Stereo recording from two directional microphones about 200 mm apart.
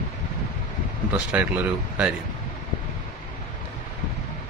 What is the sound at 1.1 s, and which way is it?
Speech, 5° right (ahead or behind).